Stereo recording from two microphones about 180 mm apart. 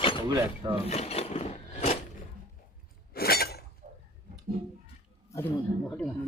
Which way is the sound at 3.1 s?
60° left (ahead or behind).